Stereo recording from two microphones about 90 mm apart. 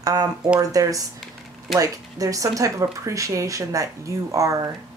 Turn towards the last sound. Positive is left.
turn(degrees=-40)  # may be behind; listen again after turning